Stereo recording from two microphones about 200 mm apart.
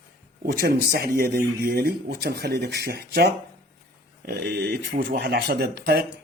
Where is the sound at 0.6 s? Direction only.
55° right (ahead or behind).